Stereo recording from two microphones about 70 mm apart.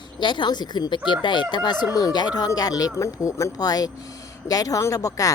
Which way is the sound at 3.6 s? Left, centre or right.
Left.